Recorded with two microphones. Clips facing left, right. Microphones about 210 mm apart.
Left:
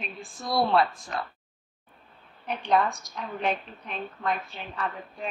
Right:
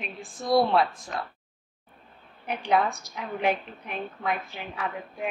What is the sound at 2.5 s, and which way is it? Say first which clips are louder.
A woman's voice: even; 10° right (ahead or behind).